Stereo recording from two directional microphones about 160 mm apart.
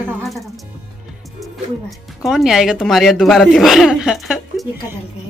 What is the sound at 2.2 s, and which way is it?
Speech, centre (ahead or behind).